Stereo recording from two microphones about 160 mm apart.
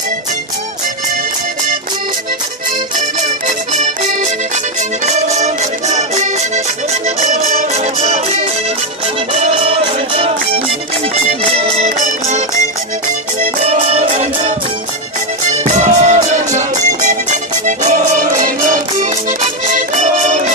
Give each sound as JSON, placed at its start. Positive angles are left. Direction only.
{"t": 3.4, "sound": "accordion", "side_deg": -50}
{"t": 9.4, "sound": "music", "side_deg": -40}
{"t": 13.6, "sound": "music", "side_deg": -45}
{"t": 15.6, "sound": "music", "side_deg": -50}
{"t": 19.7, "sound": "accordion", "side_deg": -45}